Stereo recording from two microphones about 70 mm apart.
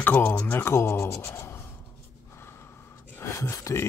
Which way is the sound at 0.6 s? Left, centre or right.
Left.